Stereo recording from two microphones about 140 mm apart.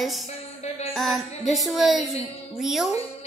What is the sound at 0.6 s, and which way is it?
Music, 50° left (ahead or behind).